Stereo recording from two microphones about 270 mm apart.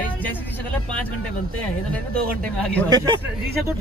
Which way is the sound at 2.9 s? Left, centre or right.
Centre.